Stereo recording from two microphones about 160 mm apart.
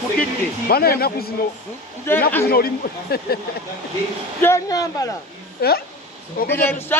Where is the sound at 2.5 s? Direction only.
75° left (ahead or behind).